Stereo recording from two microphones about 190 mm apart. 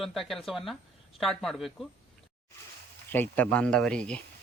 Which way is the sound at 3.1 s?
10° left (ahead or behind).